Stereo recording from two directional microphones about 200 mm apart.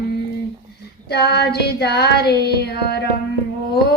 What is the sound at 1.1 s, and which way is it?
Hands, 55° left (ahead or behind).